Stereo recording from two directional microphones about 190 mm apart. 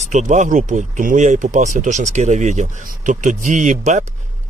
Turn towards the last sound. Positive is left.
turn(degrees=-40)  # may be behind; listen again after turning